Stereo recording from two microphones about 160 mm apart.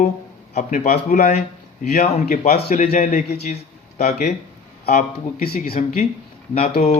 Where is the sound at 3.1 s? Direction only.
60° left (ahead or behind).